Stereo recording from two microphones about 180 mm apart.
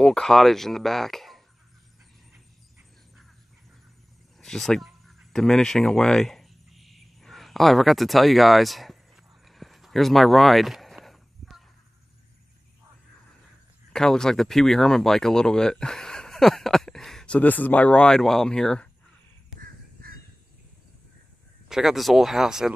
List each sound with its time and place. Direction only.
0.0 s speech: 5° left (ahead or behind)
4.4 s a sound: centre (ahead or behind)
13.9 s speech: 5° left (ahead or behind)
19.6 s crow: 55° right (ahead or behind)
21.6 s speech: centre (ahead or behind)